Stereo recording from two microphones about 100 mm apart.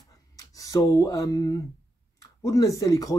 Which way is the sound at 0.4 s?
35° left (ahead or behind).